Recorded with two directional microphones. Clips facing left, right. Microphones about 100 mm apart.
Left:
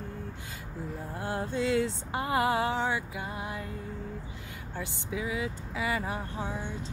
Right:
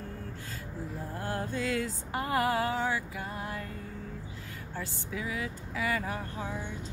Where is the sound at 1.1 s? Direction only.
25° left (ahead or behind).